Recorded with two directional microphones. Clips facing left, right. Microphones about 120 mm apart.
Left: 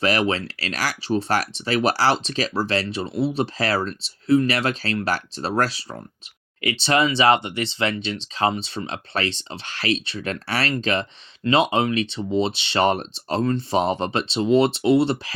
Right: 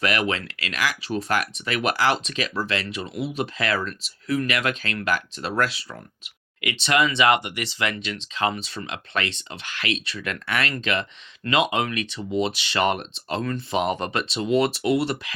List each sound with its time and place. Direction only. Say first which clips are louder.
0.0 s speech: left 3 dB; 30° left (ahead or behind)